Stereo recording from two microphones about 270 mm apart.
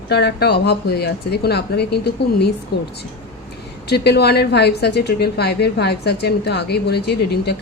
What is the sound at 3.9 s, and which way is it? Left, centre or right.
Speech, left.